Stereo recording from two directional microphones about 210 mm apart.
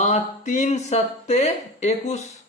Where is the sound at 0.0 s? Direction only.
35° left (ahead or behind).